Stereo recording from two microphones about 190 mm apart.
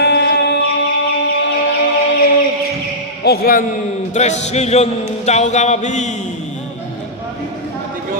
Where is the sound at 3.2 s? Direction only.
55° left (ahead or behind).